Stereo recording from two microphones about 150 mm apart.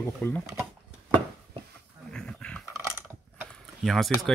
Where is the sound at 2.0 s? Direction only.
5° left (ahead or behind).